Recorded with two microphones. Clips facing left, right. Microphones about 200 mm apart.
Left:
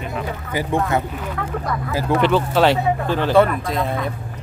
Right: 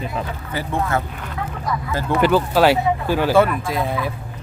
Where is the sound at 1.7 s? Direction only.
55° left (ahead or behind).